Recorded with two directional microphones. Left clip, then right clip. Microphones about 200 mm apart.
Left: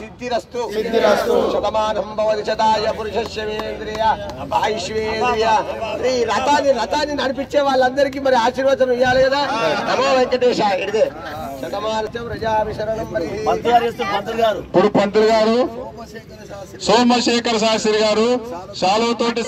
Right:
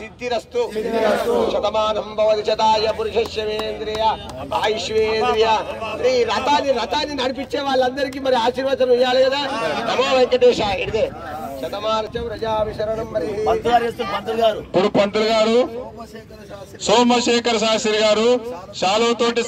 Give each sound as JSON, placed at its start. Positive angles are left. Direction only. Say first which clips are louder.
{"t": 1.5, "sound": "a man's voice", "louder": "left 1 dB", "side_deg": -25}
{"t": 13.5, "sound": "speech", "louder": "left 2 dB", "side_deg": -45}
{"t": 14.7, "sound": "a man's voice", "louder": "left 2 dB", "side_deg": -25}
{"t": 16.8, "sound": "a man's voice", "louder": "left 1 dB", "side_deg": -25}